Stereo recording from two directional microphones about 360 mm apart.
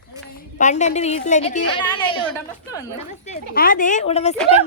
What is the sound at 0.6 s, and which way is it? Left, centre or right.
A woman's voice, centre.